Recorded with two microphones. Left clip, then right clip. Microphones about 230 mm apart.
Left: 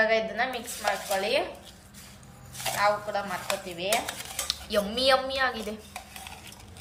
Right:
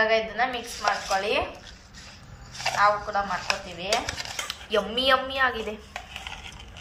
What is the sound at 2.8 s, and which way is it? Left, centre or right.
A woman's voice, centre.